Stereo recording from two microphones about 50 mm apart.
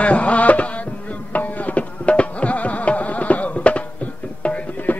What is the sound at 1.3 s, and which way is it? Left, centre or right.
Music, left.